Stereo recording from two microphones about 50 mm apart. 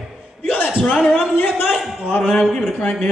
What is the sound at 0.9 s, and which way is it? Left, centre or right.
A man's voice, centre.